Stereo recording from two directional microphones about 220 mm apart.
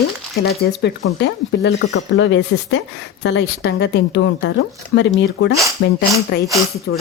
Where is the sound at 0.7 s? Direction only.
50° left (ahead or behind).